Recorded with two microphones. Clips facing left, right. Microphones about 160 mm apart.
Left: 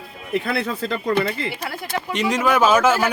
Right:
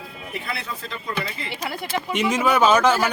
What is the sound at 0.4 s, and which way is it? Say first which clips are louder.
Speech: left 8 dB; 55° left (ahead or behind).